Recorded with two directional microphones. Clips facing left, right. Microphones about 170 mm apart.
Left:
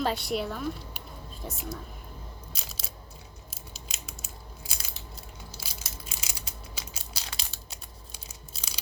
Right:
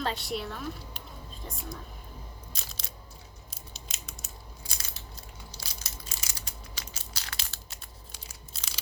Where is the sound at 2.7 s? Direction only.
5° left (ahead or behind).